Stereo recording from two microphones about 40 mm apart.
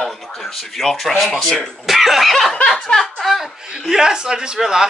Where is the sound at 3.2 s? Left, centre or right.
Centre.